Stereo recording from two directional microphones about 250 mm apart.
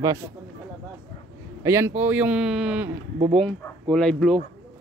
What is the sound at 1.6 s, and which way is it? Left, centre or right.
Speech, centre.